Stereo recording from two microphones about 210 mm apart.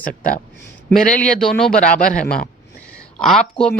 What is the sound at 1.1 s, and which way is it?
Speech, 5° left (ahead or behind).